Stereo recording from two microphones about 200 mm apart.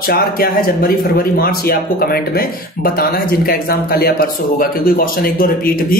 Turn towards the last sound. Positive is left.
turn(degrees=45)  # may be behind; listen again after turning